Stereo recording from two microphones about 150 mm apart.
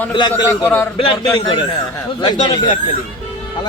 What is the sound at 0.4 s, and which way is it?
Speech, 15° left (ahead or behind).